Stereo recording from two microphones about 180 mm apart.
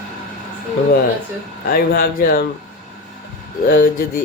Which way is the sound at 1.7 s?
55° left (ahead or behind).